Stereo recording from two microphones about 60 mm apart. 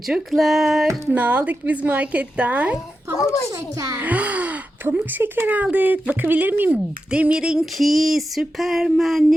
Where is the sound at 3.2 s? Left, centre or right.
Left.